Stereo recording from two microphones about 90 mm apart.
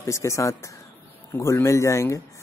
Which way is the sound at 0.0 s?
35° left (ahead or behind).